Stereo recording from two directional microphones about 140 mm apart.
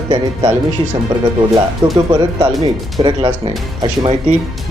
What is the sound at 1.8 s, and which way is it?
Speech, 35° right (ahead or behind).